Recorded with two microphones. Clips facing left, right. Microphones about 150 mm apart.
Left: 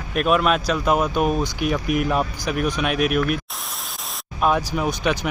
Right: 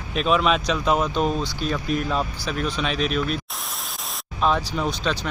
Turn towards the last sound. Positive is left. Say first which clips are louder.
# left 3 dB
turn(degrees=15)  # may be behind; listen again after turning